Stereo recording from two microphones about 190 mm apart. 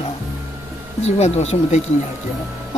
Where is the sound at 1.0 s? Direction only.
35° left (ahead or behind).